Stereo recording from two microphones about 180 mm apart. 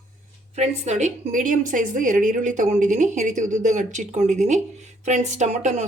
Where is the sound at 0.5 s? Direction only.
40° right (ahead or behind).